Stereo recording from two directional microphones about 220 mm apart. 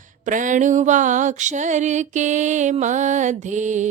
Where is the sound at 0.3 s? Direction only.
35° right (ahead or behind).